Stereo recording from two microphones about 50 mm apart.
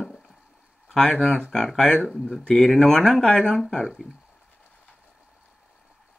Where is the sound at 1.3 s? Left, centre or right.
Centre.